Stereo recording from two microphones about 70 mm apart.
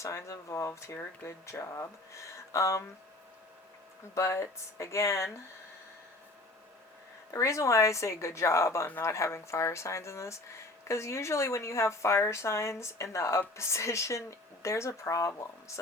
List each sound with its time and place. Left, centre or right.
0.0 s speech: left
0.7 s speech: left
4.1 s speech: left
7.3 s speech: left